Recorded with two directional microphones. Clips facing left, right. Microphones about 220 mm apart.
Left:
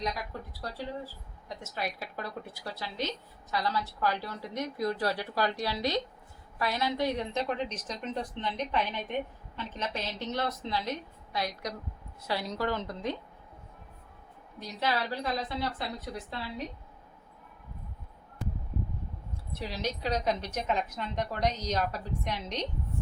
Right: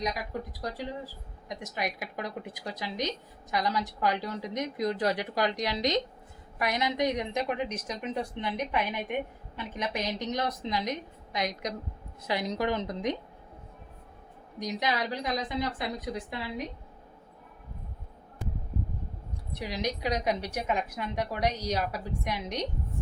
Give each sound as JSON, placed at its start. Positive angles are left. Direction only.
{"t": 0.6, "sound": "speech", "side_deg": -15}
{"t": 14.6, "sound": "speech", "side_deg": -15}
{"t": 19.5, "sound": "speech", "side_deg": -15}